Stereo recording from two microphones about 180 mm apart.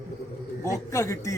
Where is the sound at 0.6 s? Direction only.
15° left (ahead or behind).